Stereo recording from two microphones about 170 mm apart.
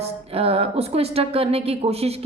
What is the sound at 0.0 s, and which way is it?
A woman's voice, 35° right (ahead or behind).